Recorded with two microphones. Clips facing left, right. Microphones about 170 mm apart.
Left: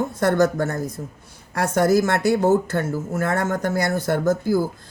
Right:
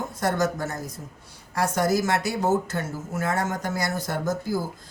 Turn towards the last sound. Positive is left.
turn(degrees=55)  # may be behind; listen again after turning